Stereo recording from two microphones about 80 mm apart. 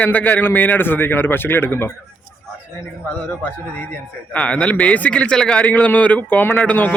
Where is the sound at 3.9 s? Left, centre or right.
Centre.